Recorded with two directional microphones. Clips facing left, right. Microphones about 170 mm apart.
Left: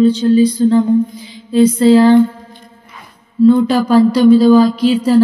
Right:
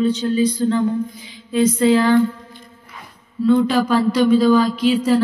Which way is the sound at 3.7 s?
35° left (ahead or behind).